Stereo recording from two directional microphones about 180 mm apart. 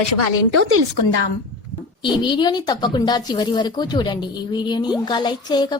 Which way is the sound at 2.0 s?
25° left (ahead or behind).